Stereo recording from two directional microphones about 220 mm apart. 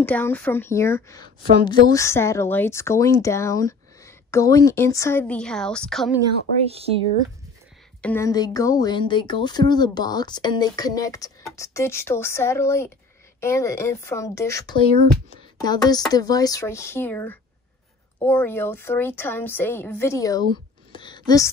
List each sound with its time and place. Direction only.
0.0 s a woman's voice: 5° left (ahead or behind)
6.6 s speech: 25° right (ahead or behind)
8.0 s a woman's voice: 10° left (ahead or behind)
15.5 s a sound: 20° left (ahead or behind)
15.9 s a woman's voice: 15° left (ahead or behind)
20.9 s a sound: 20° left (ahead or behind)